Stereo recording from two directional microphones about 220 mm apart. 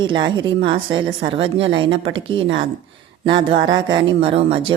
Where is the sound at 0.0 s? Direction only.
20° right (ahead or behind).